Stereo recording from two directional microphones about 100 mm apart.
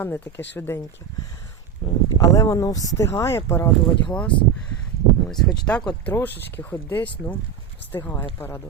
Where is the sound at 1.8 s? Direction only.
60° left (ahead or behind).